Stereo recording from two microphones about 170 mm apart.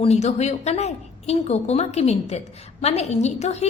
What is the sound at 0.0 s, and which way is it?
A woman's voice, 40° left (ahead or behind).